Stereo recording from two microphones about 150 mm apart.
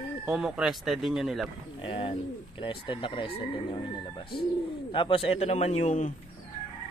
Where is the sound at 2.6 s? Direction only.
35° left (ahead or behind).